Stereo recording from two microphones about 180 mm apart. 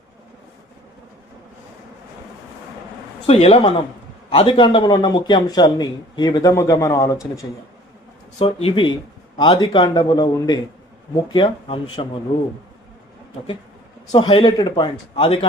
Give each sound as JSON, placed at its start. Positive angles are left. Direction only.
{"t": 3.2, "sound": "a man's voice", "side_deg": 35}
{"t": 8.4, "sound": "a man's voice", "side_deg": 30}
{"t": 14.1, "sound": "a man's voice", "side_deg": 25}